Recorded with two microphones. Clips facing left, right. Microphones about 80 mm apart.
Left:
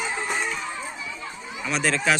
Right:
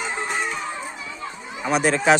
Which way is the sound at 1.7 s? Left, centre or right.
Centre.